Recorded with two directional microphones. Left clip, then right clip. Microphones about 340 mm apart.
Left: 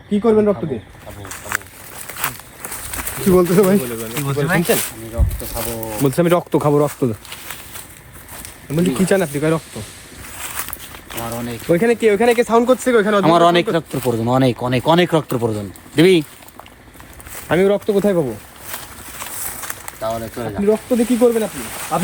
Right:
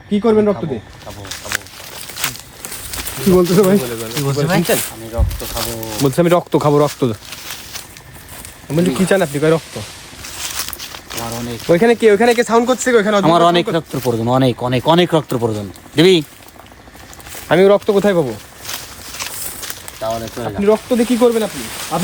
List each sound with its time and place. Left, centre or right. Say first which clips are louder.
0.2 s speech: right 1 dB; centre
1.2 s a sound: right 1 dB; centre
2.1 s speech: right 2 dB; centre
9.0 s speech: right 4 dB; right
10.2 s walk: right 4 dB; centre
11.7 s speech: right 4 dB; right
13.2 s speech: right 1 dB; centre
17.5 s speech: right 4 dB; right; by 18.3 s centre
19.2 s clip-clop: right 5 dB; centre
19.8 s speech: right 2 dB; centre